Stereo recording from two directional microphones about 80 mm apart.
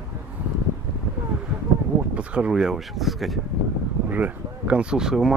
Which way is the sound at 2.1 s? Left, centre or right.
Centre.